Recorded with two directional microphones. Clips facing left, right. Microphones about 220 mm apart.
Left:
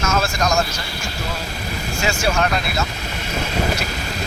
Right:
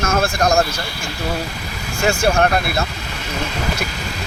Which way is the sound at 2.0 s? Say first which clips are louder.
Right 5 dB; 55° right (ahead or behind).